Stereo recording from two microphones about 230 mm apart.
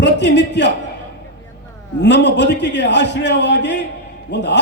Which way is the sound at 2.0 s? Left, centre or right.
Left.